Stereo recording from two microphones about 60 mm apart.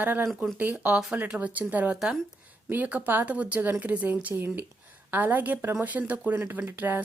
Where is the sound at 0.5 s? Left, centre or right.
Right.